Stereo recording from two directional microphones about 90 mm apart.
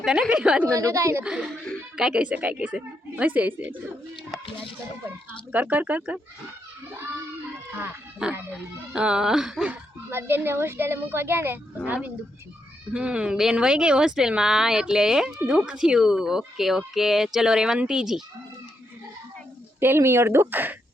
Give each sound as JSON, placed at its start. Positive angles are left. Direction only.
{"t": 0.0, "sound": "speech", "side_deg": -10}
{"t": 0.7, "sound": "speech", "side_deg": -35}
{"t": 1.2, "sound": "speech", "side_deg": -10}
{"t": 5.5, "sound": "speech", "side_deg": -15}
{"t": 7.7, "sound": "speech", "side_deg": -25}
{"t": 8.9, "sound": "speech", "side_deg": -10}
{"t": 10.1, "sound": "speech", "side_deg": -25}
{"t": 19.8, "sound": "speech", "side_deg": -25}